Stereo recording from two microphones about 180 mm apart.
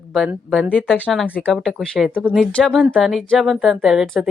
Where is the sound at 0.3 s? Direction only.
5° right (ahead or behind).